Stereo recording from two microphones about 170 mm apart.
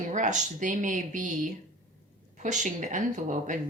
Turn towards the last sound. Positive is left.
turn(degrees=-50)  # may be behind; listen again after turning